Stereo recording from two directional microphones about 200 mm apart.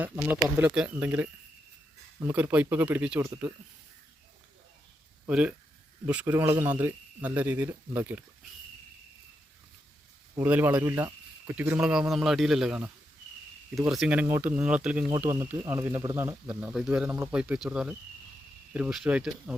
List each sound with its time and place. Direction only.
0.0 s speech: 10° right (ahead or behind)
5.3 s speech: 5° right (ahead or behind)
10.3 s speech: 10° right (ahead or behind)